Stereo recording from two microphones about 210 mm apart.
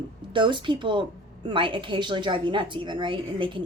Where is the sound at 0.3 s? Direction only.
25° right (ahead or behind).